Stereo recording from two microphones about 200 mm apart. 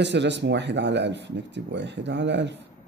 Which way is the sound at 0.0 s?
60° right (ahead or behind).